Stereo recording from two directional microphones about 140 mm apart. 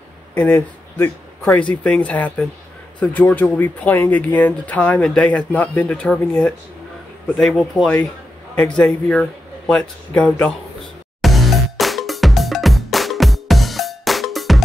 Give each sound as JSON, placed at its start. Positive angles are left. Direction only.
{"t": 0.3, "sound": "speech", "side_deg": 15}
{"t": 11.1, "sound": "music", "side_deg": 0}